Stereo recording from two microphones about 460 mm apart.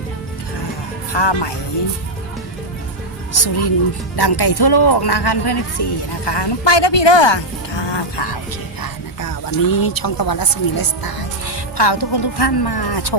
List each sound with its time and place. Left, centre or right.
1.1 s a man's voice: left
3.3 s a man's voice: left
8.8 s speech: left